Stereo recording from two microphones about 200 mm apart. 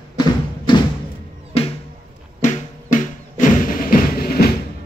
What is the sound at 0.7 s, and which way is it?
Music, 25° left (ahead or behind).